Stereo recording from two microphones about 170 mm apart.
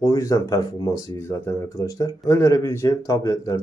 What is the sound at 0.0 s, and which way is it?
Speech, 20° left (ahead or behind).